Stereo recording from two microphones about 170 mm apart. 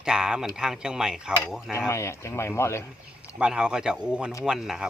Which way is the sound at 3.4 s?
5° right (ahead or behind).